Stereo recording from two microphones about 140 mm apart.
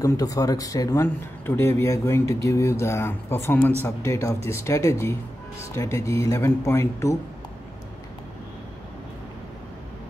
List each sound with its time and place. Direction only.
0.0 s speech: 25° left (ahead or behind)